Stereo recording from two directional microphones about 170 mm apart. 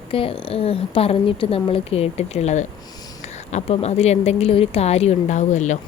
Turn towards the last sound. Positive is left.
turn(degrees=45)  # may be behind; listen again after turning